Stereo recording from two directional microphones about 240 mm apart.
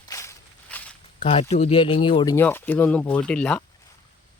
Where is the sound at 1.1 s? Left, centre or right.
Left.